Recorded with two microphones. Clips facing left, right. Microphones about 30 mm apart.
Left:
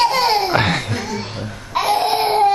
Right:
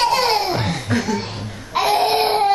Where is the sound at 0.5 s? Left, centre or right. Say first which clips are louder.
Left 6 dB; left.